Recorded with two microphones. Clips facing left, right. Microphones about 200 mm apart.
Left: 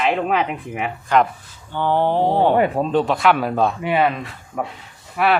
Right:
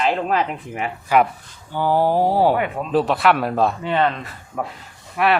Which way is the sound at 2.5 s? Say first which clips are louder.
Left 5 dB; 35° left (ahead or behind).